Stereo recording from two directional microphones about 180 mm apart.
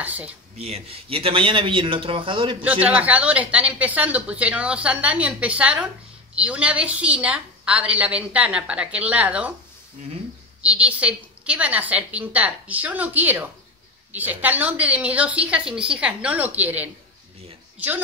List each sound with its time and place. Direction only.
0.0 s a woman's voice: 10° right (ahead or behind)
0.6 s a man's voice: 35° right (ahead or behind)
2.6 s a woman's voice: 10° right (ahead or behind)
10.6 s a woman's voice: 5° right (ahead or behind)